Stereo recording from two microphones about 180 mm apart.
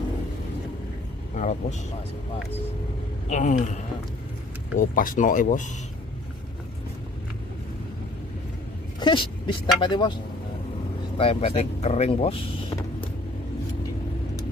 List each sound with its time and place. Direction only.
1.3 s speech: 40° left (ahead or behind)
3.3 s speech: 40° left (ahead or behind)
9.0 s speech: 25° left (ahead or behind)
11.1 s speech: 35° left (ahead or behind)